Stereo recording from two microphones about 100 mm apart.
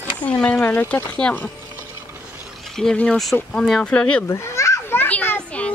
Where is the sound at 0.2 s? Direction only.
10° left (ahead or behind).